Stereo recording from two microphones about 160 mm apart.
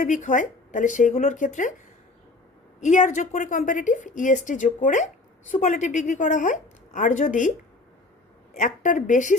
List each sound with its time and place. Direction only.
0.0 s a woman's voice: 50° left (ahead or behind)
2.8 s a woman's voice: 50° left (ahead or behind)
8.5 s a woman's voice: 50° left (ahead or behind)